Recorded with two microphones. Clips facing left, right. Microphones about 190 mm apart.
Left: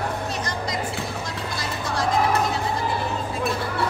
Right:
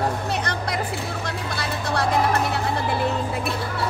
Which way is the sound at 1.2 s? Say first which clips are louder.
Right 2 dB; 65° right (ahead or behind).